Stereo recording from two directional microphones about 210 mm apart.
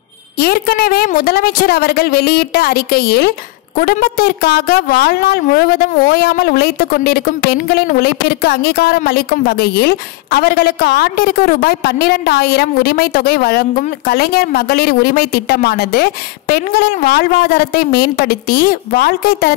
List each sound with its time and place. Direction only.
0.4 s a woman's voice: 45° left (ahead or behind)